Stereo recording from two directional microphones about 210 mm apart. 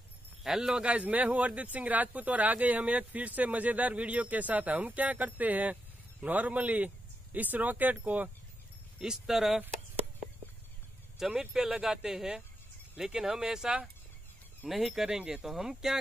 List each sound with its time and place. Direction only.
0.4 s speech: centre (ahead or behind)
11.1 s speech: centre (ahead or behind)